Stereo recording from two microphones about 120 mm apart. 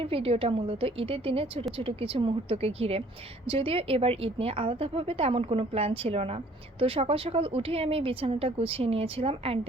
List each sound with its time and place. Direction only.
0.0 s a woman's voice: 50° right (ahead or behind)